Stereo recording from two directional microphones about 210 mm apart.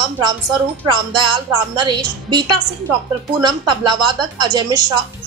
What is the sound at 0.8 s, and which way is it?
A woman's voice, 20° right (ahead or behind).